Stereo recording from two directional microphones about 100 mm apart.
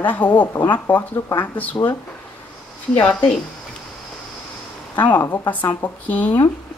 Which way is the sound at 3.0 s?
15° left (ahead or behind).